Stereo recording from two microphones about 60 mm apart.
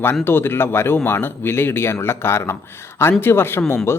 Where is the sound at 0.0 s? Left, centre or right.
Left.